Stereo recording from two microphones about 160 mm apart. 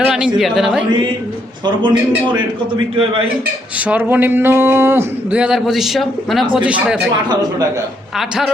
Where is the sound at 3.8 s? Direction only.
10° right (ahead or behind).